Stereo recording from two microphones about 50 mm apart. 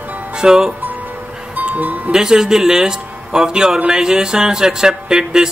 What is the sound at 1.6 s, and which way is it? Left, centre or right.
Music, right.